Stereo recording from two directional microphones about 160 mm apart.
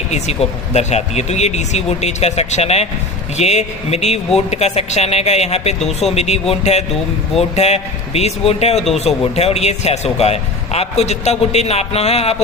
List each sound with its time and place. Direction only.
0.1 s speech: 45° left (ahead or behind)
8.8 s speech: centre (ahead or behind)
9.3 s speech: 40° left (ahead or behind)